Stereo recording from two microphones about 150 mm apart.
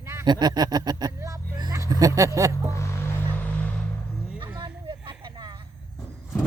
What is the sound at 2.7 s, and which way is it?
Music, 20° left (ahead or behind).